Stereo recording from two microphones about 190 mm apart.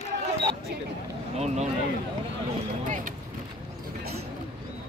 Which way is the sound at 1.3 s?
35° right (ahead or behind).